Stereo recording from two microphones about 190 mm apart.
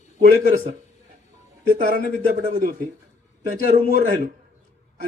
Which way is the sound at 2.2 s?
45° right (ahead or behind).